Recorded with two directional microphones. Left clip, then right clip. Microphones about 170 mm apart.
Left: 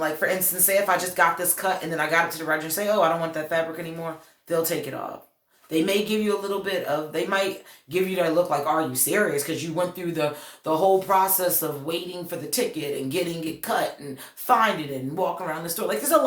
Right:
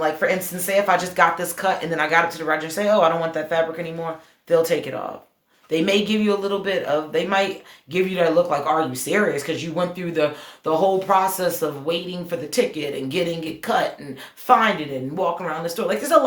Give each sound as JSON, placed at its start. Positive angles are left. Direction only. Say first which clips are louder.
{"t": 0.2, "sound": "speech", "louder": "right 3 dB", "side_deg": -40}